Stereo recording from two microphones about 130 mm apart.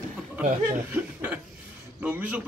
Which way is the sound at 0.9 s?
10° right (ahead or behind).